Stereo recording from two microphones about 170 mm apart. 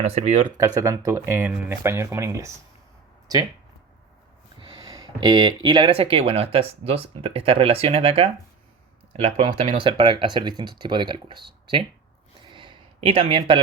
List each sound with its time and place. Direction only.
0.0 s speech: 35° right (ahead or behind)
0.4 s speech: 20° right (ahead or behind)
4.6 s speech: 20° right (ahead or behind)
12.5 s a sound: 30° right (ahead or behind)